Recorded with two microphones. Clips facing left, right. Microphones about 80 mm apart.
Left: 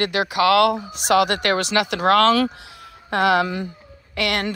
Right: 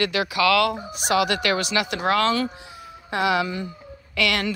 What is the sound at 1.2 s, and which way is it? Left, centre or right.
Speech, left.